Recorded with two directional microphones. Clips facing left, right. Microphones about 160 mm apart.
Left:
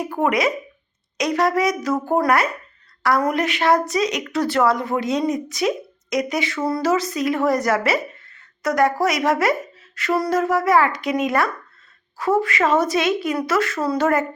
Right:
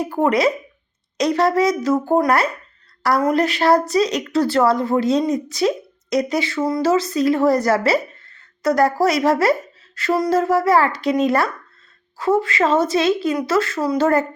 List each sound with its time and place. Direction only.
0.2 s a woman's voice: 30° right (ahead or behind)
13.8 s a woman's voice: 20° right (ahead or behind)